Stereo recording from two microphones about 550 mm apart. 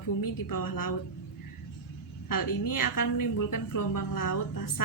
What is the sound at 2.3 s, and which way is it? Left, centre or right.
A woman's voice, left.